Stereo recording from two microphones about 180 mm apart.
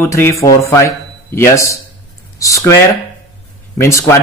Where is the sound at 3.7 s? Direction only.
15° left (ahead or behind).